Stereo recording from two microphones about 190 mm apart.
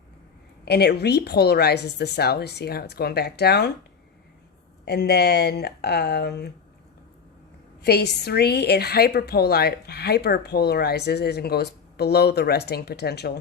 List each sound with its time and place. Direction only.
0.6 s a woman's voice: 60° left (ahead or behind)
4.9 s a woman's voice: 60° left (ahead or behind)
7.8 s a woman's voice: 60° left (ahead or behind)